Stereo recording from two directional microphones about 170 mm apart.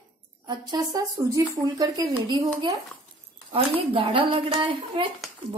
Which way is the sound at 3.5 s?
30° right (ahead or behind).